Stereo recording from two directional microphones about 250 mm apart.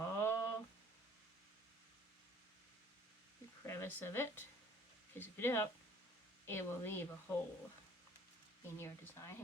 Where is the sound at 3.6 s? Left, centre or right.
Centre.